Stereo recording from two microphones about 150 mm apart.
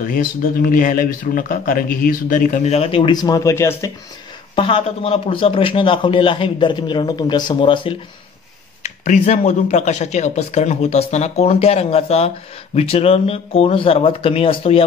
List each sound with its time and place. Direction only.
0.0 s speech: 70° left (ahead or behind); by 3.9 s 20° left (ahead or behind)
4.6 s a man's voice: 35° left (ahead or behind)
8.8 s a man's voice: 50° left (ahead or behind)